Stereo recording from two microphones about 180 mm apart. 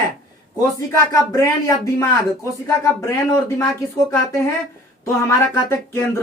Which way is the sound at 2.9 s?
15° left (ahead or behind).